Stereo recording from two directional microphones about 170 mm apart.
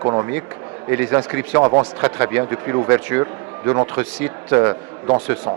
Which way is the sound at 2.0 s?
10° right (ahead or behind).